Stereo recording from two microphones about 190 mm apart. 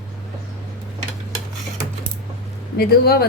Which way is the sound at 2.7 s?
55° left (ahead or behind).